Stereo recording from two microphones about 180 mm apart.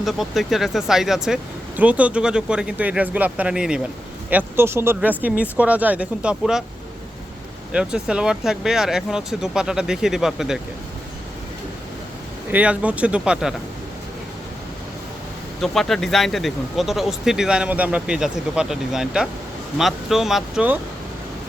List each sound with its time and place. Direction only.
0.0 s speech: centre (ahead or behind)
7.7 s speech: 5° right (ahead or behind)
12.5 s speech: 10° right (ahead or behind)
15.6 s speech: centre (ahead or behind)